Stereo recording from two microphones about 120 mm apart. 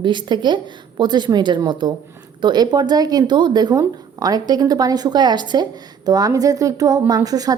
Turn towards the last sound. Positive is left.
turn(degrees=-30)  # may be behind; listen again after turning